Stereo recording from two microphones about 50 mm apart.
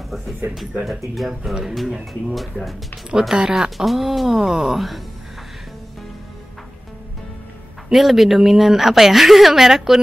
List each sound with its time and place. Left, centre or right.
0.8 s a woman's voice: centre
2.3 s a woman's voice: centre
3.1 s speech: centre
3.7 s a woman's voice: centre
7.9 s a woman's voice: centre